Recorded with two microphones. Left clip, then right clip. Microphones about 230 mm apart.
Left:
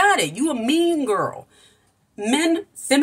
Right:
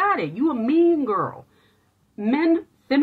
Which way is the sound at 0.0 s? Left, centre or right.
Centre.